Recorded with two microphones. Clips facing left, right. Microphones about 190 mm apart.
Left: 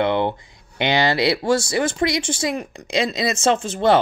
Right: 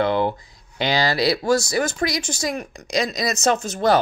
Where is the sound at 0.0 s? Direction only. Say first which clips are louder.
Even; 25° left (ahead or behind).